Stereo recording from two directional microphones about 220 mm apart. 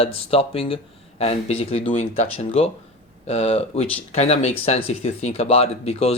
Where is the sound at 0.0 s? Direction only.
25° left (ahead or behind).